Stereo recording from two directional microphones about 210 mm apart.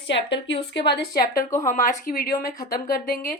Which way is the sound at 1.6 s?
40° left (ahead or behind).